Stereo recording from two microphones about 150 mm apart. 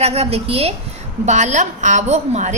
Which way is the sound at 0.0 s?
45° right (ahead or behind).